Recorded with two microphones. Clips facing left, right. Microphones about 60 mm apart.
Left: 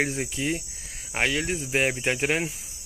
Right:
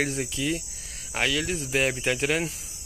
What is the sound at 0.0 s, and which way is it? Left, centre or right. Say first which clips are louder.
Speech: even; left.